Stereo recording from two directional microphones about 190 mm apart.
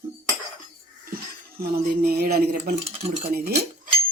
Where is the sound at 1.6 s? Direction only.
55° right (ahead or behind).